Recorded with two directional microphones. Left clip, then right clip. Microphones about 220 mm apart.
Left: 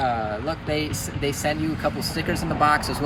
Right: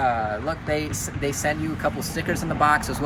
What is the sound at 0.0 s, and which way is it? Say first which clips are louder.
Speech: right 1 dB; centre (ahead or behind).